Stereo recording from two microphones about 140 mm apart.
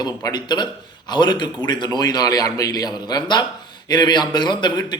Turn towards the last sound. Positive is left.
turn(degrees=30)  # may be behind; listen again after turning